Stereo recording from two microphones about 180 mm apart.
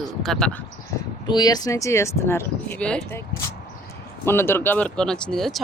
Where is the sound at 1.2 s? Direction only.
25° left (ahead or behind); by 3.2 s 5° left (ahead or behind).